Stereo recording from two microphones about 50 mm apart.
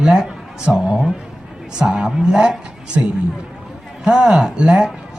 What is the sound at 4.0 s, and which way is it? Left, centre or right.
Speech, centre.